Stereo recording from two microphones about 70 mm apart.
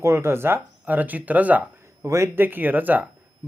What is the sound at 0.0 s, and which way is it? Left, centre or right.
Speech, right.